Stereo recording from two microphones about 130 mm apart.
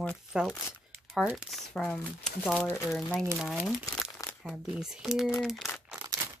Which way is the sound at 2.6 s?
15° left (ahead or behind).